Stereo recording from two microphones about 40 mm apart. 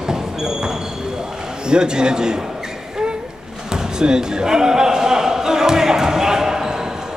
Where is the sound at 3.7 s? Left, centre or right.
Centre.